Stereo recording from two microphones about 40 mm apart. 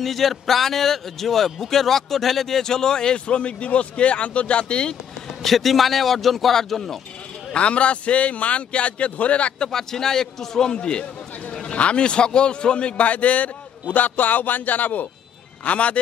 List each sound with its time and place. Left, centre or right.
0.0 s a man's voice: centre
3.3 s speech: left
5.4 s a man's voice: centre
7.5 s a man's voice: left
9.7 s a man's voice: centre; by 15.0 s left
15.6 s a man's voice: left